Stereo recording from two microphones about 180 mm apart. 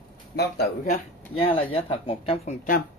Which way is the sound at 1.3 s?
30° left (ahead or behind).